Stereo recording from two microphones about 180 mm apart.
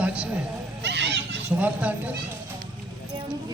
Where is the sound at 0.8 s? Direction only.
70° right (ahead or behind).